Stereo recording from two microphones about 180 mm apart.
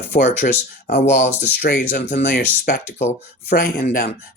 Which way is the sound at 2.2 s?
60° left (ahead or behind).